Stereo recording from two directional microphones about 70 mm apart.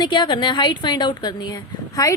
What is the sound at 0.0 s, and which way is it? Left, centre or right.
A woman's voice, left.